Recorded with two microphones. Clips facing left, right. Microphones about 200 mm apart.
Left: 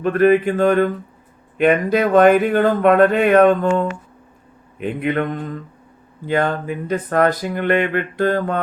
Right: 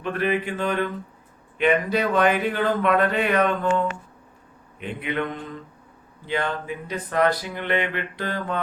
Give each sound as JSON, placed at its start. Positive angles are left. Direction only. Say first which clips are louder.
{"t": 0.0, "sound": "speech", "louder": "left 10 dB", "side_deg": 45}
{"t": 4.8, "sound": "speech", "louder": "left 7 dB", "side_deg": 45}